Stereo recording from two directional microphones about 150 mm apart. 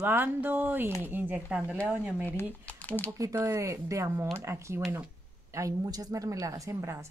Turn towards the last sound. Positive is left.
turn(degrees=-20)  # may be behind; listen again after turning